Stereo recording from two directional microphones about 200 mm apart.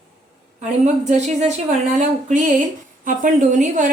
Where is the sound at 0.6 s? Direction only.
35° right (ahead or behind).